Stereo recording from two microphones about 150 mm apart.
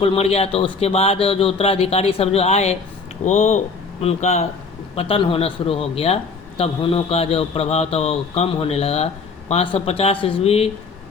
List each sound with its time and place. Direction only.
0.0 s a man's voice: 40° left (ahead or behind)